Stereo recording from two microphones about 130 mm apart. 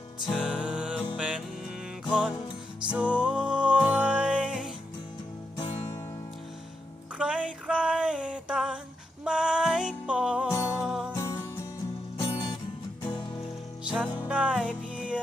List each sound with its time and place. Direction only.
0.3 s music: 5° right (ahead or behind)
7.2 s a sound: 10° right (ahead or behind)
9.2 s music: 5° right (ahead or behind)
11.2 s music: 20° left (ahead or behind)
13.8 s music: 10° right (ahead or behind)